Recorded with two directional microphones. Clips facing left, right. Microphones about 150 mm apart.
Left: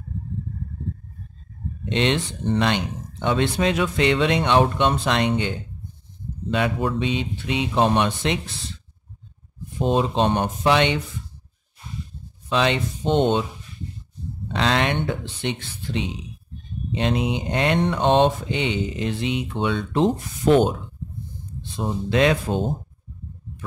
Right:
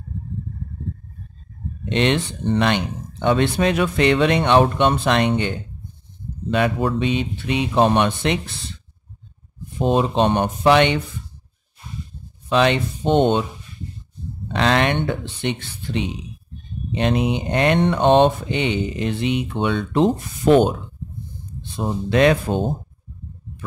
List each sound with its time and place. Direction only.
1.9 s speech: 55° right (ahead or behind)
6.5 s speech: 45° right (ahead or behind)
9.8 s speech: 60° right (ahead or behind)
12.4 s speech: 60° right (ahead or behind)
14.5 s speech: 60° right (ahead or behind)
21.7 s speech: 55° right (ahead or behind)